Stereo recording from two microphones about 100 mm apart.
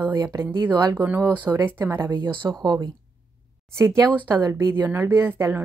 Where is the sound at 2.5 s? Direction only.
40° right (ahead or behind).